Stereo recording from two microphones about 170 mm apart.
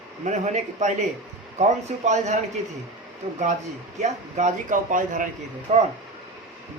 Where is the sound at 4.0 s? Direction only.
45° right (ahead or behind).